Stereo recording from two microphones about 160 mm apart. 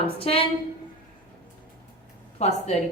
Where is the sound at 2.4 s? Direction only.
45° left (ahead or behind).